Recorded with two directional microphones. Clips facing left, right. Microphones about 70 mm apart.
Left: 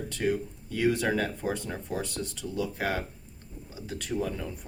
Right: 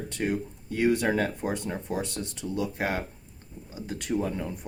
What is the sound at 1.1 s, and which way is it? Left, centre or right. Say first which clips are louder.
Speech: right 2 dB; right.